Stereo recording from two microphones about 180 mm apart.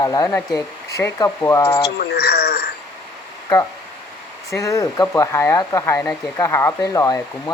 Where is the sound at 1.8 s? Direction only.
65° left (ahead or behind).